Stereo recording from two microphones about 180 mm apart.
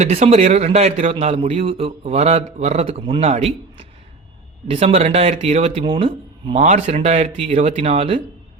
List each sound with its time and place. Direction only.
0.0 s a man's voice: 35° right (ahead or behind)